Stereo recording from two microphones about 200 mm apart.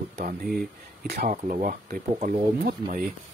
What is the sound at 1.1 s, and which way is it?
Speech, 45° right (ahead or behind).